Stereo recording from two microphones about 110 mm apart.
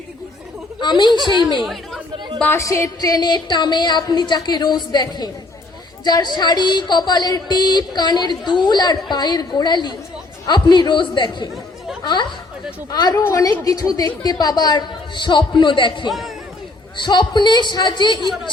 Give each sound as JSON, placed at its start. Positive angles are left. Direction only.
{"t": 0.8, "sound": "a woman's voice", "side_deg": 40}
{"t": 1.6, "sound": "speech", "side_deg": 0}
{"t": 2.4, "sound": "a man's voice", "side_deg": 25}
{"t": 16.0, "sound": "speech", "side_deg": 0}
{"t": 17.0, "sound": "a man's voice", "side_deg": 45}